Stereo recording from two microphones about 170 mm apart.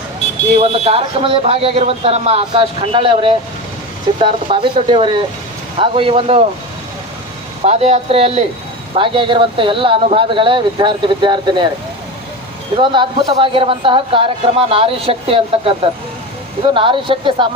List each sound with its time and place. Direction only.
0.5 s speech: 35° right (ahead or behind)
7.6 s speech: 40° right (ahead or behind)
12.7 s speech: 30° right (ahead or behind)
16.7 s speech: 30° right (ahead or behind)